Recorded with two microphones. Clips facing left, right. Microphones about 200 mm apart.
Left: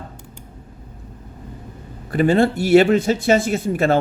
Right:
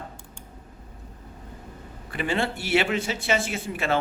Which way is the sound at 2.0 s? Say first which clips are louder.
Left 11 dB; 40° left (ahead or behind).